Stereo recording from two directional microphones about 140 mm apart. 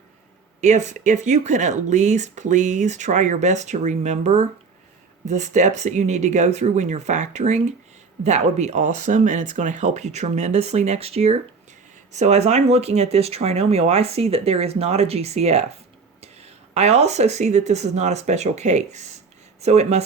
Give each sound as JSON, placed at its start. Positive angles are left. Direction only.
{"t": 0.6, "sound": "speech", "side_deg": -60}